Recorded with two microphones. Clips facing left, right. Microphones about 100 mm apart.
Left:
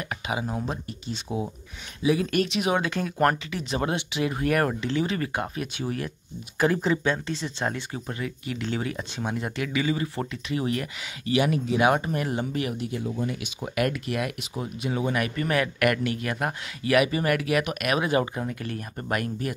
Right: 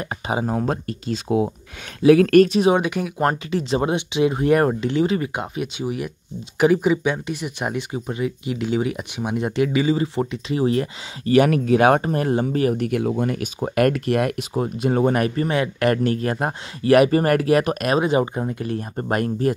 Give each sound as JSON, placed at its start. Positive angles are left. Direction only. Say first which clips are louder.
{"t": 0.0, "sound": "a sound", "louder": "right 6 dB", "side_deg": -35}
{"t": 0.5, "sound": "speech", "louder": "right 8 dB", "side_deg": -50}
{"t": 1.3, "sound": "speech", "louder": "right 10 dB", "side_deg": -30}
{"t": 2.0, "sound": "speech", "louder": "right 10 dB", "side_deg": -65}
{"t": 2.3, "sound": "speech", "louder": "right 12 dB", "side_deg": -45}
{"t": 2.6, "sound": "speech", "louder": "right 7 dB", "side_deg": -20}
{"t": 11.2, "sound": "speech", "louder": "right 8 dB", "side_deg": -50}
{"t": 12.7, "sound": "speech", "louder": "right 8 dB", "side_deg": -65}
{"t": 13.6, "sound": "speech", "louder": "right 8 dB", "side_deg": -45}
{"t": 15.2, "sound": "speech", "louder": "right 4 dB", "side_deg": -30}
{"t": 18.0, "sound": "speech", "louder": "right 5 dB", "side_deg": -25}